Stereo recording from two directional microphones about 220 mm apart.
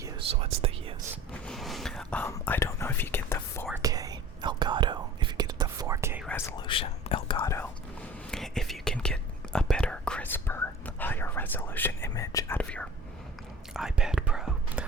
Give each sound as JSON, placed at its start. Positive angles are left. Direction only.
{"t": 0.3, "sound": "whispering", "side_deg": -25}
{"t": 1.3, "sound": "whispering", "side_deg": 0}
{"t": 3.8, "sound": "whispering", "side_deg": -15}
{"t": 6.2, "sound": "whispering", "side_deg": 10}
{"t": 6.6, "sound": "whispering", "side_deg": 25}
{"t": 8.3, "sound": "whispering", "side_deg": 0}